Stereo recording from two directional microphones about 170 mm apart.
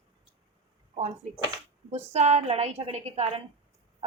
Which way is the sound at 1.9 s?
40° right (ahead or behind).